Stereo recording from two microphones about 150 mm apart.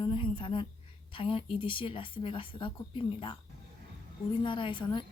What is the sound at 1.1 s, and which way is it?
Speech, 35° left (ahead or behind).